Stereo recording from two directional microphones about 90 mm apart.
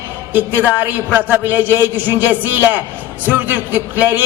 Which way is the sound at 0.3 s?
20° right (ahead or behind).